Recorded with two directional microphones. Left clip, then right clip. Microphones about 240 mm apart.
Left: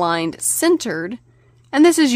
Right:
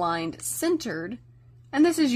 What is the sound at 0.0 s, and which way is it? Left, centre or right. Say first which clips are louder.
A woman's voice: left 8 dB; left.